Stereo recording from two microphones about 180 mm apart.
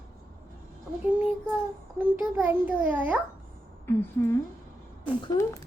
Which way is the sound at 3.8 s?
15° left (ahead or behind).